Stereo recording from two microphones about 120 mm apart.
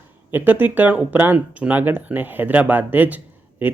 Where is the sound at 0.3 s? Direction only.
15° right (ahead or behind).